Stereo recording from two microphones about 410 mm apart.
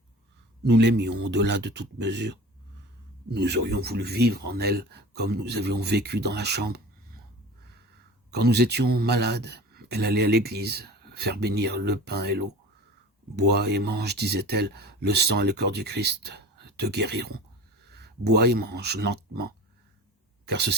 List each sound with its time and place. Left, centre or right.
0.6 s speech: right
8.3 s speech: right